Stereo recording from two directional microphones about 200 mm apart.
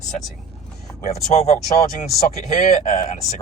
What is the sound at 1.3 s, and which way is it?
Speech, 30° left (ahead or behind).